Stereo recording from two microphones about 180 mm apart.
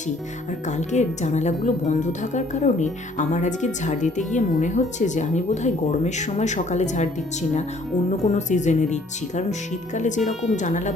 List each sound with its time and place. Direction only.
0.7 s a woman's voice: 40° left (ahead or behind)
8.2 s a woman's voice: 40° left (ahead or behind)